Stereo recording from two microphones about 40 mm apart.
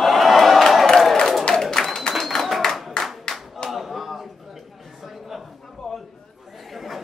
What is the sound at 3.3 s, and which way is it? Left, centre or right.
Clapping, centre.